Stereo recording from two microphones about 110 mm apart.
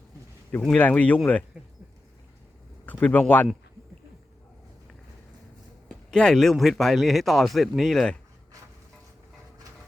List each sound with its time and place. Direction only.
0.8 s speech: 15° left (ahead or behind)
2.8 s speech: 15° left (ahead or behind)
6.1 s speech: 5° left (ahead or behind)